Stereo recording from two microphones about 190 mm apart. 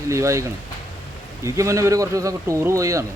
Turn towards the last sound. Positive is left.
turn(degrees=-15)  # may be behind; listen again after turning